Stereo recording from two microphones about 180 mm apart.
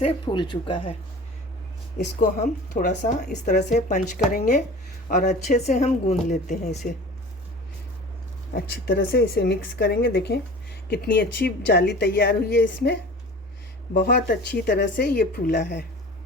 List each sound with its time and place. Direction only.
0.3 s speech: 25° left (ahead or behind)
2.0 s a woman's voice: 40° left (ahead or behind)
3.0 s speech: 60° left (ahead or behind)
3.7 s a woman's voice: 40° left (ahead or behind)
4.4 s speech: 55° left (ahead or behind)
5.0 s a woman's voice: 45° left (ahead or behind)
8.5 s a woman's voice: 70° left (ahead or behind)
13.9 s speech: 55° left (ahead or behind)